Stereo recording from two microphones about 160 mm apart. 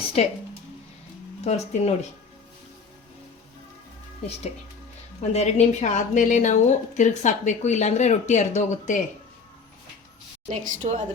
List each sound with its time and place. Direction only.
0.2 s speech: 40° left (ahead or behind)
1.5 s a woman's voice: 45° left (ahead or behind)
5.3 s a woman's voice: 45° left (ahead or behind)
10.5 s a woman's voice: 55° right (ahead or behind)